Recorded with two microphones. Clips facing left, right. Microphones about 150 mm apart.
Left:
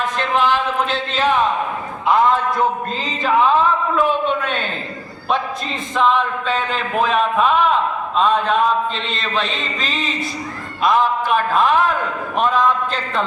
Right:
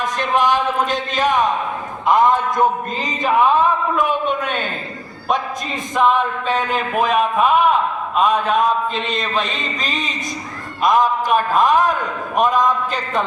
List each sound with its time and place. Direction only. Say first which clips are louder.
0.0 s a man's voice: right 1 dB; 15° right (ahead or behind)
6.0 s a man's voice: right 1 dB; 15° right (ahead or behind)